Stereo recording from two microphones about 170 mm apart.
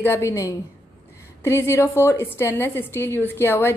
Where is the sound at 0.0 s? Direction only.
15° left (ahead or behind).